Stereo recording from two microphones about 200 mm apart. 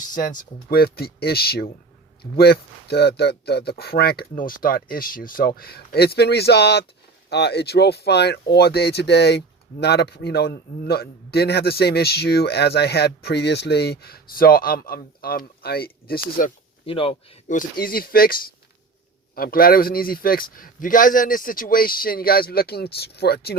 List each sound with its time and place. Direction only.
0.1 s a man's voice: 40° left (ahead or behind)
16.8 s speech: 25° left (ahead or behind)
17.5 s a man's voice: 45° left (ahead or behind)